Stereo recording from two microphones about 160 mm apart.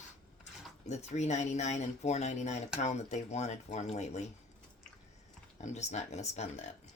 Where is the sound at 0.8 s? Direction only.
45° left (ahead or behind).